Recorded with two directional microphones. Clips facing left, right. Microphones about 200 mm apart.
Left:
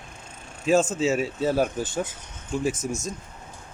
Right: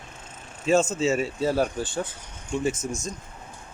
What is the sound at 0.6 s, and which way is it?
Speech, centre (ahead or behind).